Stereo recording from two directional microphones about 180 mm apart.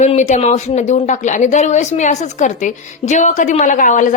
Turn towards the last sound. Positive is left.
turn(degrees=45)  # may be behind; listen again after turning